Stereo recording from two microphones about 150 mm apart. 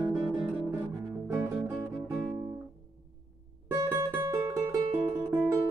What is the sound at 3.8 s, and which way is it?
Music, 20° right (ahead or behind).